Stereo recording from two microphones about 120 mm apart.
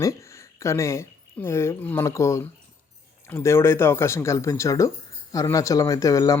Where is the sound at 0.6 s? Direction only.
25° left (ahead or behind).